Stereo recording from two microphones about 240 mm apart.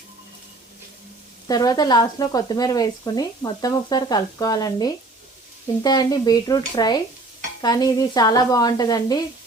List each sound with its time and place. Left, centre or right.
1.5 s speech: centre